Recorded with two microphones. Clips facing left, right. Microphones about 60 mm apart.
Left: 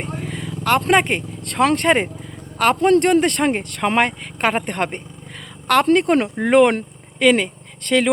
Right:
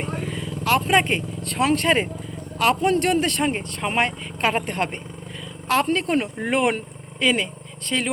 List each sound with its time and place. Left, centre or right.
0.3 s vehicle: left
0.8 s speech: left
5.6 s speech: left